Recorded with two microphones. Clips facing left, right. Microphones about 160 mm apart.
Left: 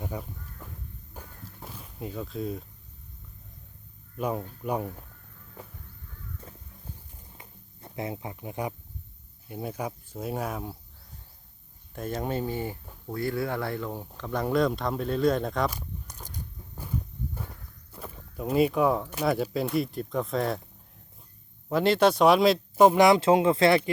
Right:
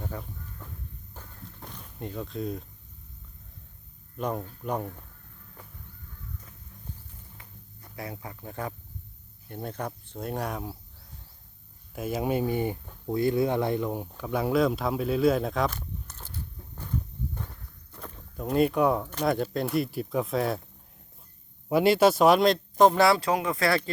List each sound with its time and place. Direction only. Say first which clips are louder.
0.0 s crow: left 1 dB; 10° left (ahead or behind)
1.1 s walk: left 1 dB; 10° left (ahead or behind)
4.2 s speech: left 1 dB; 5° left (ahead or behind)
7.3 s a sound: even; 25° left (ahead or behind)
9.5 s speech: left 1 dB; 5° left (ahead or behind)
11.9 s speech: right 3 dB; 10° right (ahead or behind)
15.7 s walk: even; 15° left (ahead or behind)
17.9 s speech: left 1 dB; 5° left (ahead or behind)
21.7 s speech: right 1 dB; 10° right (ahead or behind); by 23.9 s 20° left (ahead or behind)